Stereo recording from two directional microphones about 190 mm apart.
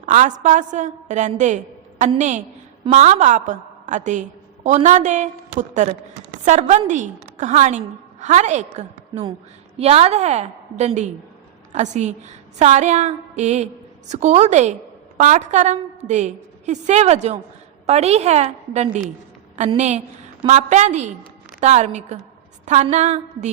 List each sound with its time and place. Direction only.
0.0 s a woman's voice: 40° right (ahead or behind)